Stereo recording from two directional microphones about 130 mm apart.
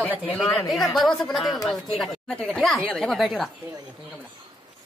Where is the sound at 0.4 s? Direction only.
5° left (ahead or behind).